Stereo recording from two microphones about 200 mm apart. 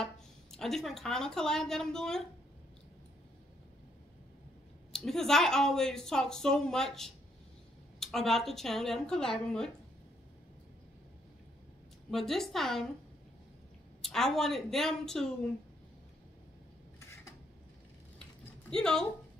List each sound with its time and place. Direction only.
0.0 s a woman's voice: centre (ahead or behind)
4.9 s speech: centre (ahead or behind)
12.1 s speech: centre (ahead or behind)
14.0 s speech: centre (ahead or behind)
18.7 s speech: 5° left (ahead or behind)